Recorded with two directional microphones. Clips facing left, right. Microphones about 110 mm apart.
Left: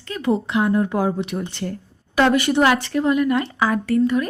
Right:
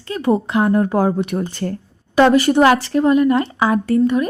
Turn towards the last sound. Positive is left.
turn(degrees=-25)  # may be behind; listen again after turning